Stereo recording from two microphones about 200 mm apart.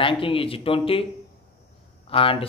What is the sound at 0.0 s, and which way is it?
A man's voice, 25° left (ahead or behind).